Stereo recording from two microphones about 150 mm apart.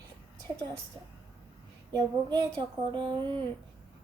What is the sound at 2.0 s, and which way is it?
Speech, 30° right (ahead or behind).